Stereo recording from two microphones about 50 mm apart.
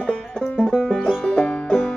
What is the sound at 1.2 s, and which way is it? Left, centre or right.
Banjo, left.